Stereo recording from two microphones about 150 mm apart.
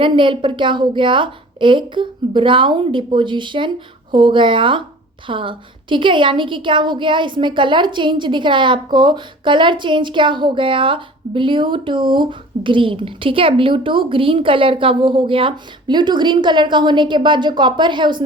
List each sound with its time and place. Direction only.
0.0 s a woman's voice: 35° right (ahead or behind)